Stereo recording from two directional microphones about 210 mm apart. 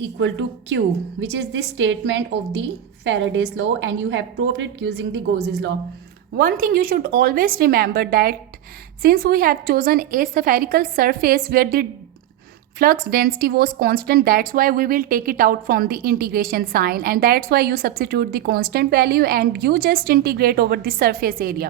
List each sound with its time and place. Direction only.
0.0 s a woman's voice: 60° right (ahead or behind)
6.3 s a woman's voice: 45° right (ahead or behind)